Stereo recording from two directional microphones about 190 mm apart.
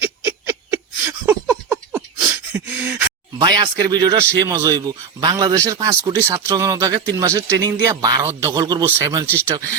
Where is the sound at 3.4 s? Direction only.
20° right (ahead or behind).